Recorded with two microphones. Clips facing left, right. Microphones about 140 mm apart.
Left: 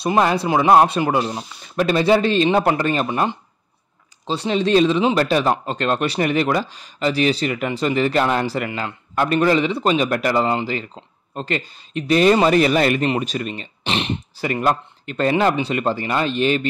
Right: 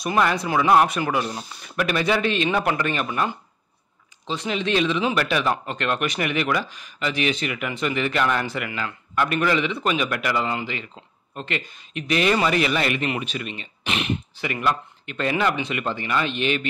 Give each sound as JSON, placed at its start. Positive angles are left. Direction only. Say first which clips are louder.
{"t": 0.0, "sound": "speech", "louder": "left 4 dB", "side_deg": 30}